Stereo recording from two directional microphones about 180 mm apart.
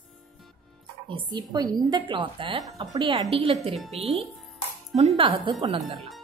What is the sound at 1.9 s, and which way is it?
Speech, 30° right (ahead or behind).